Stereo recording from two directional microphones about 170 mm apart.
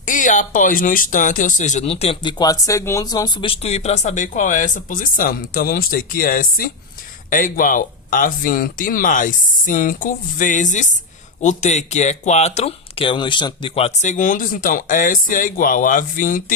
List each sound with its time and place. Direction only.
0.0 s speech: 50° left (ahead or behind)
2.4 s speech: 20° left (ahead or behind); by 16.4 s 50° left (ahead or behind)